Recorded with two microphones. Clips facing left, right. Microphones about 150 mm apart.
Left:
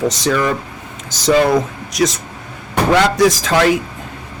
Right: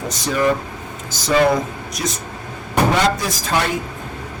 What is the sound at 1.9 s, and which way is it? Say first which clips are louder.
Speech: left 10 dB; 90° left.